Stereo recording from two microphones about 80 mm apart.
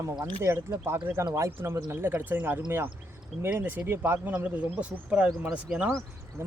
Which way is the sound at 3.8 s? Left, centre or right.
Right.